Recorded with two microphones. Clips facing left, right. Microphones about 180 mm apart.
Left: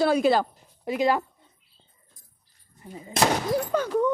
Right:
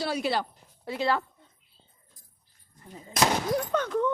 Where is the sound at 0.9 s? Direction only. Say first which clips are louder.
Left 4 dB; 15° left (ahead or behind).